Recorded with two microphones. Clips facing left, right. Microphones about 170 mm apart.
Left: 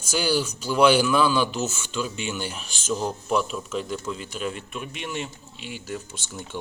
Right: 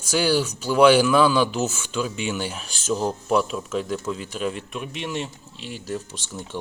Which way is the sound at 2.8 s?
35° right (ahead or behind).